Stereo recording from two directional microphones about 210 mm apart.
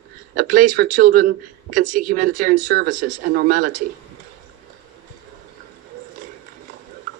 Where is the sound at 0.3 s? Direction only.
40° right (ahead or behind).